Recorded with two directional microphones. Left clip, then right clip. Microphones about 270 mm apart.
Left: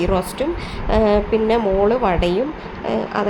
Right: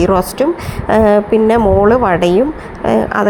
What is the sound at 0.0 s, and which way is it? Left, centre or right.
Speech, right.